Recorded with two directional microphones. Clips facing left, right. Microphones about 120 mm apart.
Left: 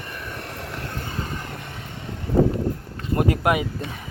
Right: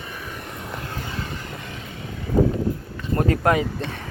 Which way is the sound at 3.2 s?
15° left (ahead or behind).